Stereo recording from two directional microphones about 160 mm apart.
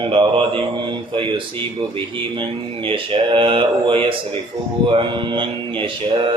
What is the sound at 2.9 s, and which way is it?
A man's voice, 35° right (ahead or behind).